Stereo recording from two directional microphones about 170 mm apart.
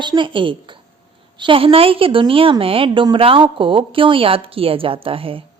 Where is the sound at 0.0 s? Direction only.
30° right (ahead or behind).